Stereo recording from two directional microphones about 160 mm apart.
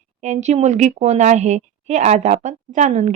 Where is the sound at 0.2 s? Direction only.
45° right (ahead or behind).